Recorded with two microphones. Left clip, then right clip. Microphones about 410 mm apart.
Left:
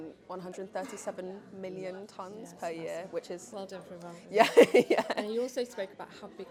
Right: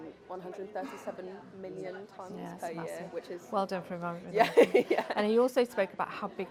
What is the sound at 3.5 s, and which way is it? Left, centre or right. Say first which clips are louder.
Speech: right 9 dB; right.